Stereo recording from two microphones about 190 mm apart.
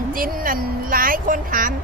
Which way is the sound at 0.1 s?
50° right (ahead or behind).